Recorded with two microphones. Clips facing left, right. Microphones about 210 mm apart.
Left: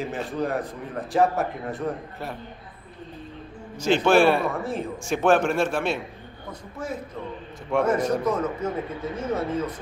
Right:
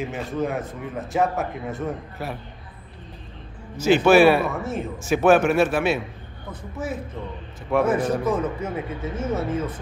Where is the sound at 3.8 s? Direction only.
5° right (ahead or behind).